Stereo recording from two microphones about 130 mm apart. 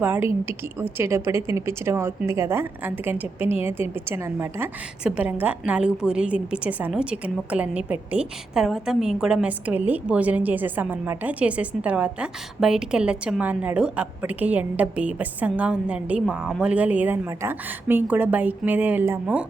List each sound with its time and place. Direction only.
0.0 s a woman's voice: 15° right (ahead or behind)